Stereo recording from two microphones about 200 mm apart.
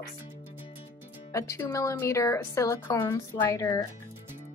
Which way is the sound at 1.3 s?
15° left (ahead or behind).